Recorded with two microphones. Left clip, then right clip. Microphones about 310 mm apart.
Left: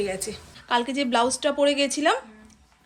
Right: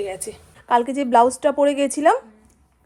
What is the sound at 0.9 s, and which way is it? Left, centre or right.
Dishes, centre.